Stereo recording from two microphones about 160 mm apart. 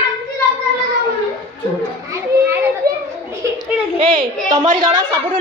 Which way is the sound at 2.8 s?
65° right (ahead or behind).